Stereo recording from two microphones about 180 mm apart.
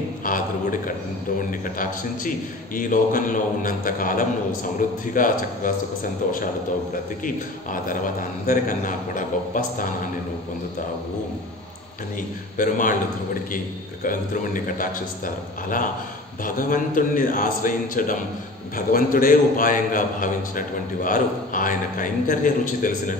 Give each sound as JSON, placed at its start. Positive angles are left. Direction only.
{"t": 0.2, "sound": "a man's voice", "side_deg": 50}
{"t": 7.2, "sound": "a man's voice", "side_deg": 50}
{"t": 12.5, "sound": "a man's voice", "side_deg": 50}
{"t": 16.4, "sound": "a man's voice", "side_deg": 50}